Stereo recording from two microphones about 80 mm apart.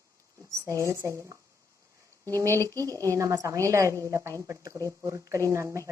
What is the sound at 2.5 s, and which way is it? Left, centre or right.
A woman's voice, right.